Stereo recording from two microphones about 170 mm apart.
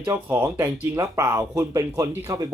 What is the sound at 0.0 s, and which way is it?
Speech, 10° right (ahead or behind).